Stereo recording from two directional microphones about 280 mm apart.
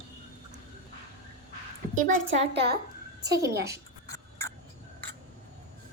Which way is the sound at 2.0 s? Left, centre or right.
Right.